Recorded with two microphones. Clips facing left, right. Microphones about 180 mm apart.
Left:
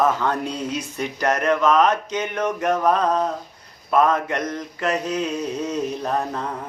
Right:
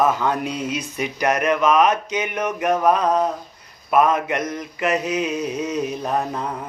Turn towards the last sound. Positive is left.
turn(degrees=-10)  # may be behind; listen again after turning